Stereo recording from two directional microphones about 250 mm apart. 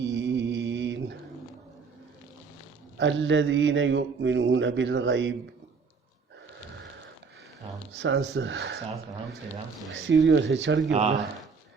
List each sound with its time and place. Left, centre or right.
0.0 s mantra: right
3.0 s speech: right
7.9 s speech: right
9.9 s speech: right